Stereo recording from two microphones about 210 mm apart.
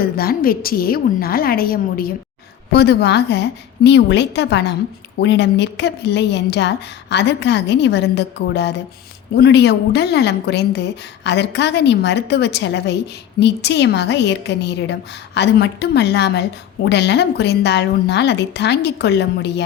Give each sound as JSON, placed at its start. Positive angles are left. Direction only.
{"t": 0.0, "sound": "a woman's voice", "side_deg": 45}